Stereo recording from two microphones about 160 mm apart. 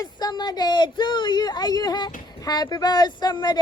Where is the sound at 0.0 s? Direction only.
25° left (ahead or behind).